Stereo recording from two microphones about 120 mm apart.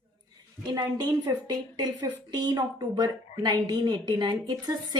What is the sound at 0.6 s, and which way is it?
Speech, 35° right (ahead or behind).